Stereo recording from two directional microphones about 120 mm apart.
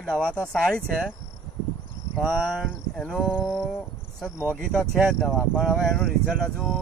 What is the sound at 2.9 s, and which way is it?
Speech, 5° left (ahead or behind).